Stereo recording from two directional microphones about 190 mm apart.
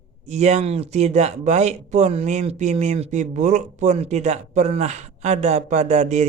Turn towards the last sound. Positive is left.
turn(degrees=-35)  # may be behind; listen again after turning